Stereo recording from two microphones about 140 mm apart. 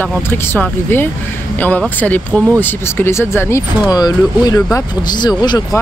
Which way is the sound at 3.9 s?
30° left (ahead or behind).